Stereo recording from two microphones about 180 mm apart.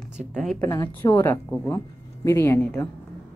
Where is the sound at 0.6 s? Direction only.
15° left (ahead or behind).